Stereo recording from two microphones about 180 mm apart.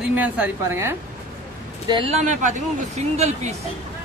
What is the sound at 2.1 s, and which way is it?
Speech, 40° right (ahead or behind).